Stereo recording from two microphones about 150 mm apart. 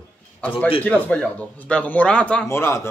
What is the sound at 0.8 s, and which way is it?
A man's voice, 10° left (ahead or behind).